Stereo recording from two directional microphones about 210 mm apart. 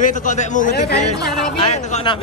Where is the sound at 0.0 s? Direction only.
35° left (ahead or behind).